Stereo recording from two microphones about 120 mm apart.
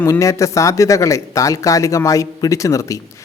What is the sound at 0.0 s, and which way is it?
Speech, 25° left (ahead or behind).